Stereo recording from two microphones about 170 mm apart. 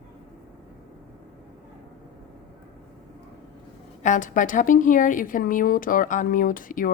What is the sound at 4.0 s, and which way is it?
Speech, 50° left (ahead or behind).